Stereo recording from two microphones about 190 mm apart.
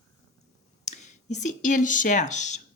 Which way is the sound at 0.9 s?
40° left (ahead or behind).